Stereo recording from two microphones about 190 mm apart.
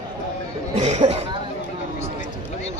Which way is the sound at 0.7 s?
35° right (ahead or behind).